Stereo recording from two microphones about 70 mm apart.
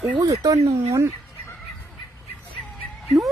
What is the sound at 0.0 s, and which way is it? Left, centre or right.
Speech, right.